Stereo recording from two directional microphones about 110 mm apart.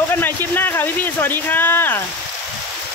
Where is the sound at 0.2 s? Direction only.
20° left (ahead or behind).